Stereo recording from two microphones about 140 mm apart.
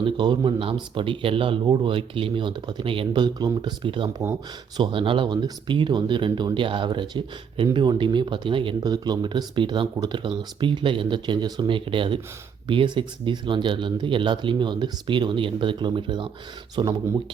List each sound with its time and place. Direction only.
0.0 s speech: 35° right (ahead or behind)